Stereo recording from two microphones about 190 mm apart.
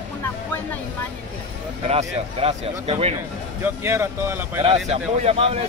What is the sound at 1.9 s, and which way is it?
Speech, 30° right (ahead or behind).